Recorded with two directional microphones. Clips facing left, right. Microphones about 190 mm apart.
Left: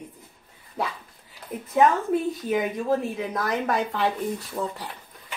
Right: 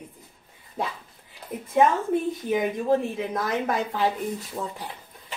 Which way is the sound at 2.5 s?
20° right (ahead or behind).